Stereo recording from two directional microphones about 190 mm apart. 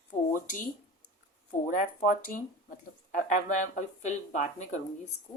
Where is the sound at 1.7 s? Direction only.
45° left (ahead or behind).